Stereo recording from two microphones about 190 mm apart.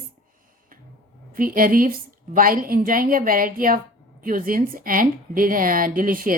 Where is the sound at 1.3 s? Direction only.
50° right (ahead or behind).